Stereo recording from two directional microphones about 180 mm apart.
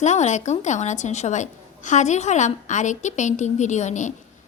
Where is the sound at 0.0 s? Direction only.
40° left (ahead or behind).